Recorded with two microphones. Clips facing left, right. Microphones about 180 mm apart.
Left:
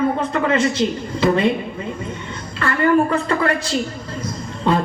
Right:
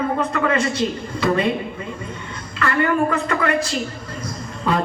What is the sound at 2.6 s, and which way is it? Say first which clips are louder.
A woman's voice: left 3 dB; 30° left (ahead or behind).